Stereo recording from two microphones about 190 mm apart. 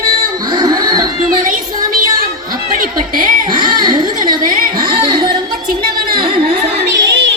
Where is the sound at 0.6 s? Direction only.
20° right (ahead or behind).